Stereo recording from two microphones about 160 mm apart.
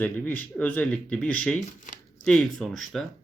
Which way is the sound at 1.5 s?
55° left (ahead or behind).